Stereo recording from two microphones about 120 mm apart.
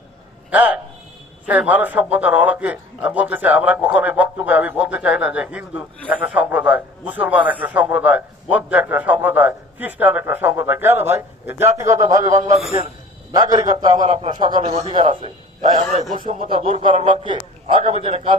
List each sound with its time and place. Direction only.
0.5 s a sound: 15° right (ahead or behind)
1.5 s a man's voice: 15° right (ahead or behind); by 14.1 s 35° right (ahead or behind)
14.1 s a man's voice: 45° right (ahead or behind)